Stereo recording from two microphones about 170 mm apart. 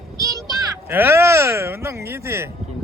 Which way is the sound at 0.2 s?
20° right (ahead or behind).